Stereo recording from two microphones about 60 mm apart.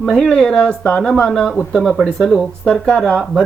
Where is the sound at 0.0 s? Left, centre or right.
Centre.